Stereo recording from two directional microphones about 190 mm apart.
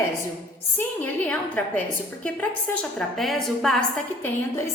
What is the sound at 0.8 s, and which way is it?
A woman's voice, 10° left (ahead or behind).